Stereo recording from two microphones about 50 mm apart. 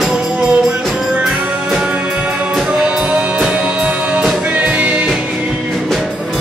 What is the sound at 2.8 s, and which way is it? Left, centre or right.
Music, centre.